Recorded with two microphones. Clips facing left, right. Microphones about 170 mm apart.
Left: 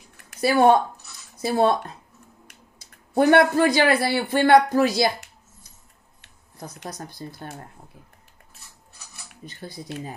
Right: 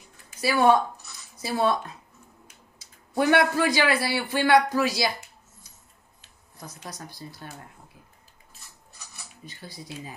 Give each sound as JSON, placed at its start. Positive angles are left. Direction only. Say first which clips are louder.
{"t": 0.2, "sound": "a sound", "louder": "left 7 dB", "side_deg": 65}
{"t": 0.5, "sound": "a man's voice", "louder": "left 3 dB", "side_deg": 50}
{"t": 3.2, "sound": "a man's voice", "louder": "left 5 dB", "side_deg": 50}
{"t": 6.8, "sound": "a man's voice", "louder": "left 5 dB", "side_deg": 55}
{"t": 9.1, "sound": "speech", "louder": "left 4 dB", "side_deg": 60}